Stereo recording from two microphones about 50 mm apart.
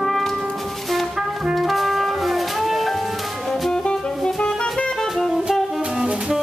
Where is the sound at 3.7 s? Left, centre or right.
Centre.